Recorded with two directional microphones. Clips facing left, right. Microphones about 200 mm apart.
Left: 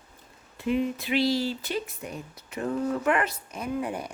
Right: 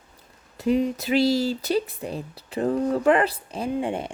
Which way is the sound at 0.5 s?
40° right (ahead or behind).